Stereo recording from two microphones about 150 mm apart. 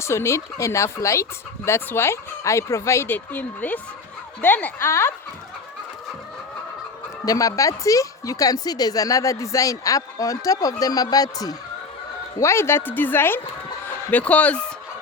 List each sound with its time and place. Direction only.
0.0 s speech: 20° left (ahead or behind)
7.3 s speech: 20° left (ahead or behind)